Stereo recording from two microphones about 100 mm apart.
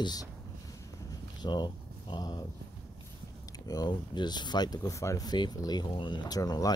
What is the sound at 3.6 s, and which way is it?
Speech, 40° left (ahead or behind).